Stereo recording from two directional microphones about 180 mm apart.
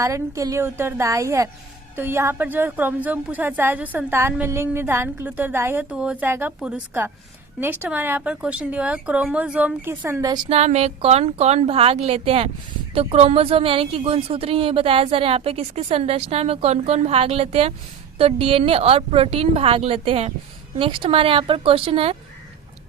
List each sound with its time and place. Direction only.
0.0 s a woman's voice: 15° right (ahead or behind)
10.5 s a woman's voice: 35° right (ahead or behind)